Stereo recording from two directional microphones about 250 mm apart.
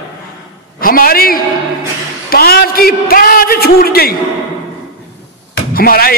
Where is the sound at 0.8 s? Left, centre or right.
Left.